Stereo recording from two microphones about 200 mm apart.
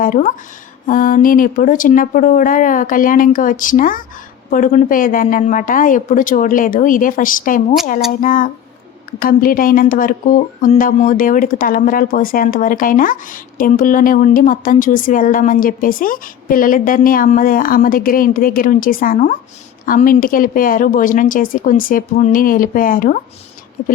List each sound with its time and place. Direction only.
0.0 s speech: 40° left (ahead or behind)